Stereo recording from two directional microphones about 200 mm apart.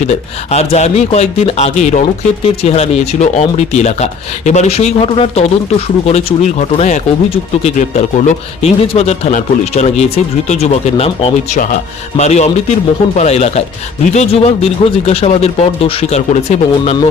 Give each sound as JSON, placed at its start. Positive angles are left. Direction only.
{"t": 0.0, "sound": "speech", "side_deg": 35}